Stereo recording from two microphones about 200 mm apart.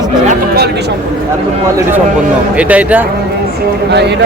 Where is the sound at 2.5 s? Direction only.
5° right (ahead or behind).